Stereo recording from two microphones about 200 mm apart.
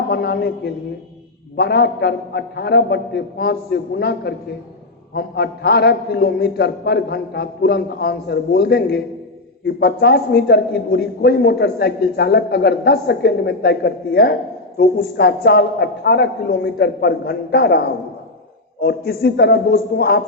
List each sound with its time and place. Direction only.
0.1 s a man's voice: 55° left (ahead or behind)